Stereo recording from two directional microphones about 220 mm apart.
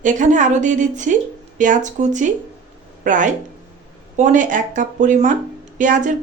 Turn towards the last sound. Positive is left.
turn(degrees=-35)  # may be behind; listen again after turning